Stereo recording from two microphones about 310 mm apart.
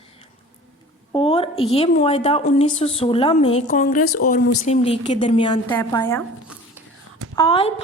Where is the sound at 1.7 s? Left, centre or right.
Centre.